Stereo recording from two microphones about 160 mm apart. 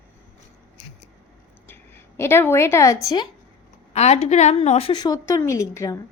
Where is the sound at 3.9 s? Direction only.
45° left (ahead or behind); by 6.0 s 20° left (ahead or behind).